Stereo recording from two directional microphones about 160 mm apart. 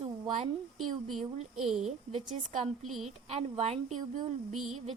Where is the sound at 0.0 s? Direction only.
35° right (ahead or behind).